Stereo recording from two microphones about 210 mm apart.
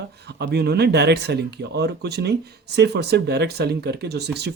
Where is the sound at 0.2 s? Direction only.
55° right (ahead or behind).